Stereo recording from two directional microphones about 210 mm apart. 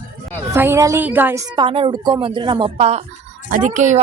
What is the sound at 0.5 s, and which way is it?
Speech, 10° right (ahead or behind).